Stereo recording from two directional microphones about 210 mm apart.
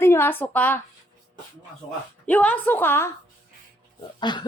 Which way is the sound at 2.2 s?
5° left (ahead or behind).